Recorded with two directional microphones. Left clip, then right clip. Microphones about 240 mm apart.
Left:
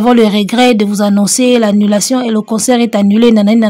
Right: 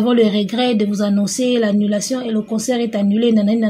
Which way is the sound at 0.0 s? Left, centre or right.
Left.